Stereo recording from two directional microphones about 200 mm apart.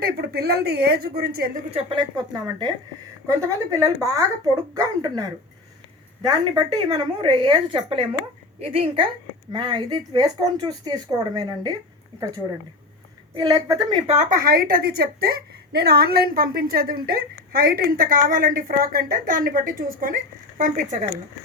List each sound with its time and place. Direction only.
0.0 s a woman's voice: 50° right (ahead or behind)
1.7 s a woman's voice: 25° right (ahead or behind)
6.2 s a woman's voice: 20° right (ahead or behind)
13.3 s a woman's voice: 20° right (ahead or behind)
14.1 s a woman's voice: 40° right (ahead or behind)